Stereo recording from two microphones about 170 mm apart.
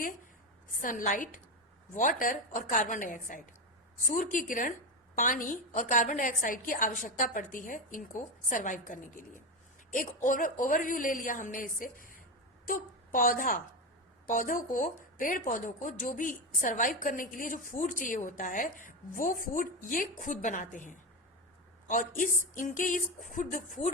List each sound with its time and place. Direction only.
0.8 s a woman's voice: 50° left (ahead or behind)